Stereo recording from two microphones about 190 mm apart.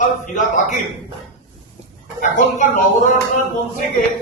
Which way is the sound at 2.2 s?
40° left (ahead or behind).